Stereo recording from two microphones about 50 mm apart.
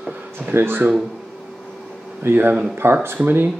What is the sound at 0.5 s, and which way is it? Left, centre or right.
Speech, right.